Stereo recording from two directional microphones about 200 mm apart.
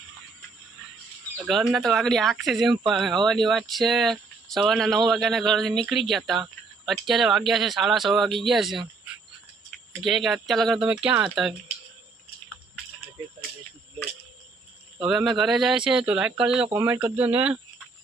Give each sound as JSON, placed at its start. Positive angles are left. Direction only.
{"t": 1.5, "sound": "speech", "side_deg": 0}
{"t": 15.1, "sound": "speech", "side_deg": 0}